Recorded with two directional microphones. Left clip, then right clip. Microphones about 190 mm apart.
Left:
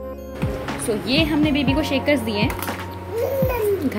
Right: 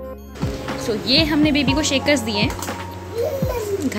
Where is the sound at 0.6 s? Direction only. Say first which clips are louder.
Right 3 dB; centre (ahead or behind).